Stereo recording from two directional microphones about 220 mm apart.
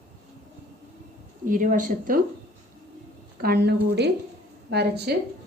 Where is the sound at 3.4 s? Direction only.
45° right (ahead or behind).